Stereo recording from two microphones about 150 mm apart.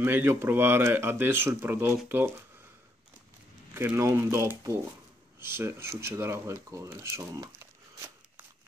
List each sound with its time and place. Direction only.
0.0 s speech: 15° right (ahead or behind)
3.7 s speech: 15° right (ahead or behind)